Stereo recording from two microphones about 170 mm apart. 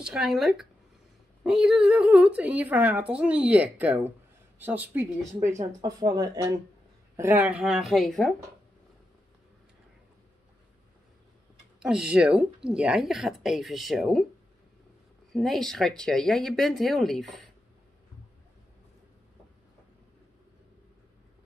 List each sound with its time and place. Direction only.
0.0 s a woman's voice: 5° right (ahead or behind)
5.8 s speech: 20° right (ahead or behind)
7.2 s speech: 10° right (ahead or behind)
11.8 s speech: 5° right (ahead or behind)
15.3 s speech: centre (ahead or behind)